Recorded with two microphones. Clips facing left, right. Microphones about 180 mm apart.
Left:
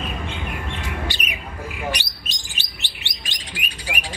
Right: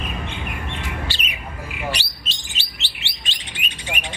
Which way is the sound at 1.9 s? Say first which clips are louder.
Right 2 dB; 15° left (ahead or behind).